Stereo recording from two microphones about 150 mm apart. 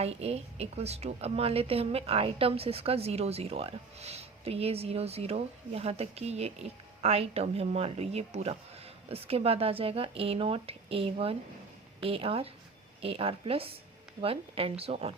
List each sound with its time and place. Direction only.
0.0 s a woman's voice: 45° right (ahead or behind)